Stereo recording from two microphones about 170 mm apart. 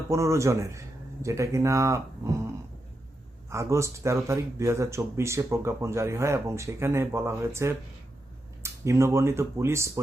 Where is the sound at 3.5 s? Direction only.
15° right (ahead or behind).